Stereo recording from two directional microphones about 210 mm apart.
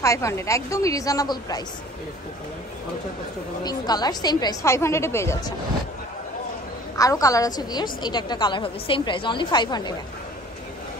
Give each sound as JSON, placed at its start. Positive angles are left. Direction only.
{"t": 0.0, "sound": "a woman's voice", "side_deg": 15}
{"t": 3.6, "sound": "a woman's voice", "side_deg": 20}
{"t": 7.0, "sound": "a woman's voice", "side_deg": 15}